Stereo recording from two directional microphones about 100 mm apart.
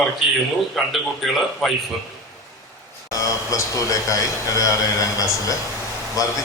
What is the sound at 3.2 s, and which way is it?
A man's voice, 35° left (ahead or behind).